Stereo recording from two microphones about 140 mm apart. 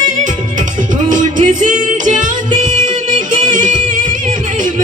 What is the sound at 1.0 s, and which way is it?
Music, 65° right (ahead or behind).